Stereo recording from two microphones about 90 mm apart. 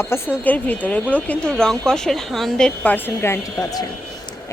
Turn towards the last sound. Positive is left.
turn(degrees=30)  # may be behind; listen again after turning